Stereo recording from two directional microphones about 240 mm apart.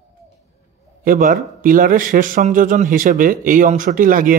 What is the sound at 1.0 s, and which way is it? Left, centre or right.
A man's voice, right.